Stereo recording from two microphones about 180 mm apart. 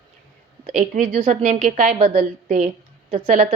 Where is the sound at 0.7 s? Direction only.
50° right (ahead or behind).